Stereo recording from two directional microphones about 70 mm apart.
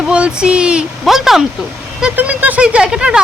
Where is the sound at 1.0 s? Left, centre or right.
Centre.